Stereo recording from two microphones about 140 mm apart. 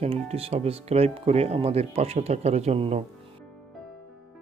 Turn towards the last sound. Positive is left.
turn(degrees=-50)  # may be behind; listen again after turning